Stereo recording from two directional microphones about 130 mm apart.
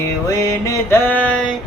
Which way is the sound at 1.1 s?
10° left (ahead or behind).